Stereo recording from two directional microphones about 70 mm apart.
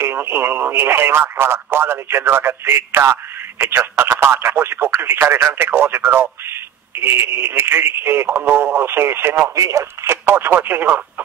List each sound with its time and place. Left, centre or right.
0.0 s speech: right
9.4 s speech: right